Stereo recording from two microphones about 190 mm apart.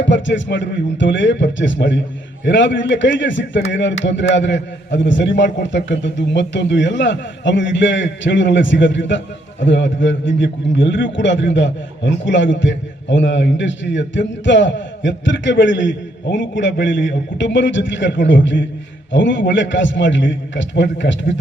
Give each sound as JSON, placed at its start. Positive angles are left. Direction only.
{"t": 0.0, "sound": "a man's voice", "side_deg": 75}